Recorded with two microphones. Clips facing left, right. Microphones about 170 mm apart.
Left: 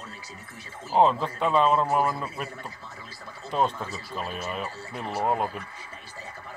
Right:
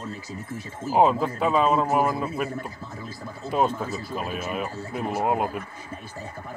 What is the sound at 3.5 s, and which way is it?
Speech, 5° right (ahead or behind).